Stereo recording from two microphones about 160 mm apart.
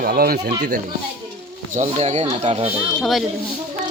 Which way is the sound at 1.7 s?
45° right (ahead or behind).